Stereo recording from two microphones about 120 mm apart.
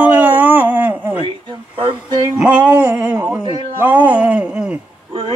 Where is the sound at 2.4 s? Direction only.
10° right (ahead or behind).